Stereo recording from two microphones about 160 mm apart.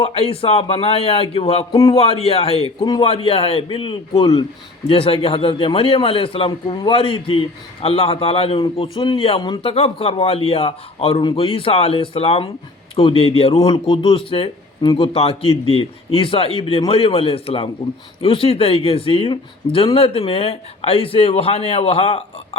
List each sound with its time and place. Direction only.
0.0 s a man's voice: 40° left (ahead or behind)